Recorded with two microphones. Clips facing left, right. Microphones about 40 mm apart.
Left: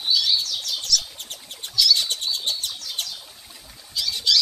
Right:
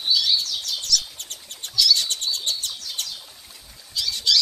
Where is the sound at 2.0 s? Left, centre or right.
Centre.